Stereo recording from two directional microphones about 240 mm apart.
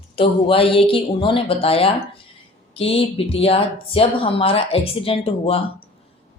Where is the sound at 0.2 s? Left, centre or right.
Left.